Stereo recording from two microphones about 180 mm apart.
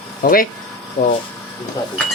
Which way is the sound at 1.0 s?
90° left.